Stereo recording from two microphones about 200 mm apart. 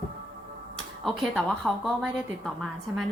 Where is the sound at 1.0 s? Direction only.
Centre (ahead or behind).